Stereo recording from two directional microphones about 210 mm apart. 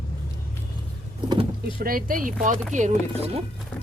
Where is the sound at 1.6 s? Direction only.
45° right (ahead or behind).